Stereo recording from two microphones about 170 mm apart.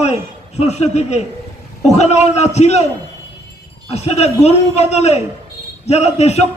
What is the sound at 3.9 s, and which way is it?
A man's voice, 40° left (ahead or behind).